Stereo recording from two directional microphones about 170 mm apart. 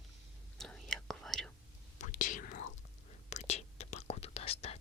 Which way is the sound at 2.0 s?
50° left (ahead or behind).